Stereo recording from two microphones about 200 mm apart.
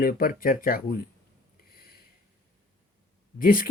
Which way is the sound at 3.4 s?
45° left (ahead or behind).